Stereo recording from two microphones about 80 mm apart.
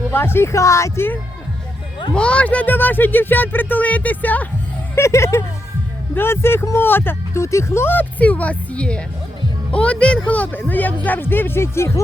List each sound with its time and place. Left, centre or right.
0.1 s speech: left
2.1 s speech: centre
4.9 s speech: left